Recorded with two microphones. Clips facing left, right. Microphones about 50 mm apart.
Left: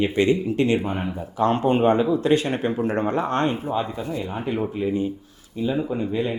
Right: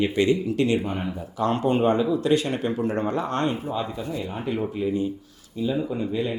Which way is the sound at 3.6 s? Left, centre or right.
Centre.